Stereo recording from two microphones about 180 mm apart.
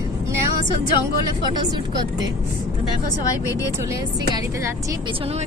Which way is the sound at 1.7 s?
20° right (ahead or behind).